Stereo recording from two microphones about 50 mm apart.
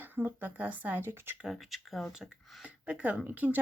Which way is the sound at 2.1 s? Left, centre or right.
Centre.